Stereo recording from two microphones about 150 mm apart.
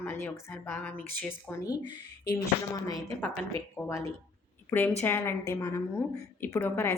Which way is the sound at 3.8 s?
15° left (ahead or behind).